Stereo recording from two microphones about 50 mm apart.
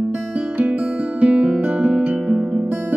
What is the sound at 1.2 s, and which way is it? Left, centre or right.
Music, right.